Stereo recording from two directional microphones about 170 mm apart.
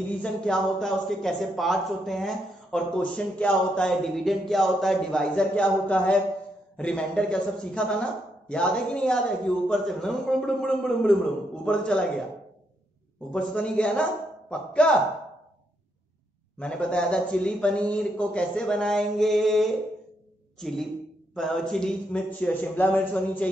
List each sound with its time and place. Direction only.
0.2 s a man's voice: 5° left (ahead or behind)
13.3 s a man's voice: 5° left (ahead or behind)
16.5 s a man's voice: 5° left (ahead or behind)